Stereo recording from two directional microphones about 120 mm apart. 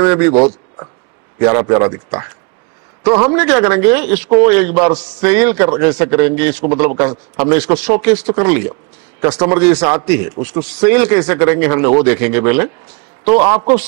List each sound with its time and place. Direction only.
0.0 s a man's voice: 25° right (ahead or behind)
3.3 s a man's voice: 25° right (ahead or behind)